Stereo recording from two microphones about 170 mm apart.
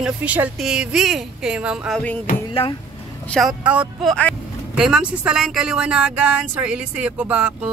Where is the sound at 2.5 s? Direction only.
30° left (ahead or behind).